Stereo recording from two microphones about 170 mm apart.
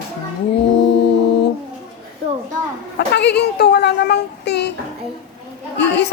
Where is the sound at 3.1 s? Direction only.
80° left.